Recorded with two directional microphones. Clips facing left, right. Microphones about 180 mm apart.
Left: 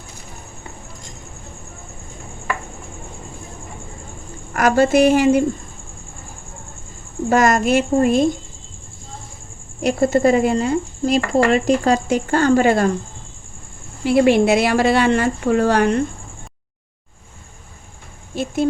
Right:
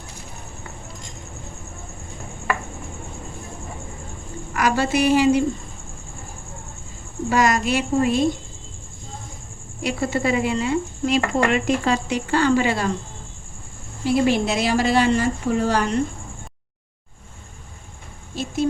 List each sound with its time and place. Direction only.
4.5 s speech: 50° left (ahead or behind)
7.3 s speech: 50° left (ahead or behind)
9.8 s speech: 45° left (ahead or behind)
14.0 s speech: 60° left (ahead or behind)
18.3 s speech: 55° left (ahead or behind)